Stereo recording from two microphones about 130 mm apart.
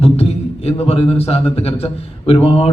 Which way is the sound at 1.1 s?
50° left (ahead or behind).